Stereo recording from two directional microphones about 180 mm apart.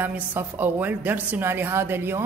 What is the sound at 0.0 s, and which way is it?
A woman's voice, 10° right (ahead or behind).